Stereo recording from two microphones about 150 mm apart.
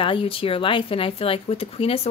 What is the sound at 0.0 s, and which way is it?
Speech, 35° left (ahead or behind).